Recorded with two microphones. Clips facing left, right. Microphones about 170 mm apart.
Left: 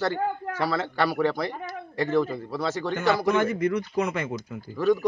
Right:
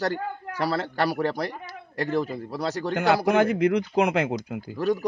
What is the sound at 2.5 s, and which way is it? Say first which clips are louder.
Speech: even; 35° right (ahead or behind).